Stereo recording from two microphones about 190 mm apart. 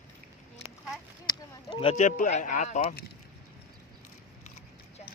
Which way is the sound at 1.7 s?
30° left (ahead or behind).